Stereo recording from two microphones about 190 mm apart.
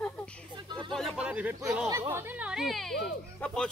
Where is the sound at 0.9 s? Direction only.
Centre (ahead or behind).